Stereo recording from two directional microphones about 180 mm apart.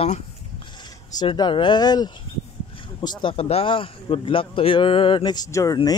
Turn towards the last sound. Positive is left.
turn(degrees=20)  # may be behind; listen again after turning